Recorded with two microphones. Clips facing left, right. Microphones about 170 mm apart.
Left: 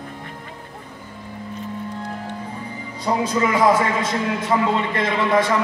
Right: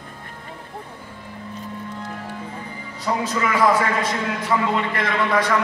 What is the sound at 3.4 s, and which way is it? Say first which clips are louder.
A man's voice: left 1 dB; 20° left (ahead or behind).